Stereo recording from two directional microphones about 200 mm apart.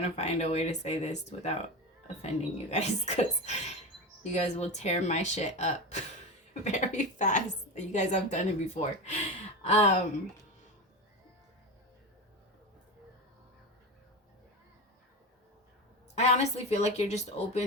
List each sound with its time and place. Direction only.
0.0 s a woman's voice: 30° left (ahead or behind)
16.2 s a woman's voice: 35° left (ahead or behind)